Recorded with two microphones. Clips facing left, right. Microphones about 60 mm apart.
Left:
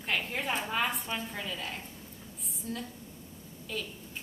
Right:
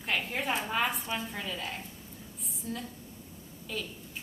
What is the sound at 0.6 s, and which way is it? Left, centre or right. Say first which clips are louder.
A woman's voice: right 1 dB; centre.